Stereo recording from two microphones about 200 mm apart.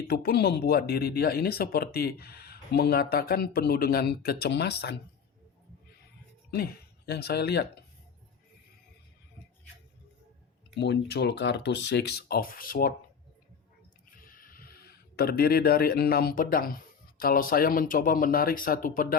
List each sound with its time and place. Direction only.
0.1 s speech: 50° left (ahead or behind)
6.5 s speech: 55° left (ahead or behind)
10.8 s speech: 55° left (ahead or behind)
14.1 s speech: 45° left (ahead or behind)